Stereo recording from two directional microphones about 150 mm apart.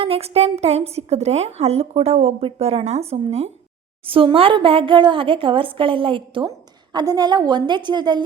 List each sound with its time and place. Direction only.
0.0 s a woman's voice: 40° right (ahead or behind)